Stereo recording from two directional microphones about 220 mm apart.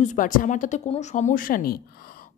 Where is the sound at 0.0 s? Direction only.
35° left (ahead or behind).